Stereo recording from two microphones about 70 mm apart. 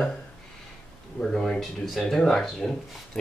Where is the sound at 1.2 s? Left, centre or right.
Centre.